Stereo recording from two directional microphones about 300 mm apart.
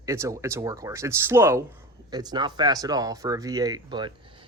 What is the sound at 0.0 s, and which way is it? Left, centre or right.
Speech, centre.